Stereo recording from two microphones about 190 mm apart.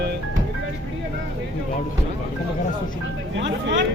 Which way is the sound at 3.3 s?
70° right (ahead or behind).